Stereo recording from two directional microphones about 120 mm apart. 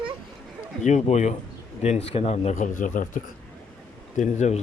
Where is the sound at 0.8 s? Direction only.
75° left (ahead or behind).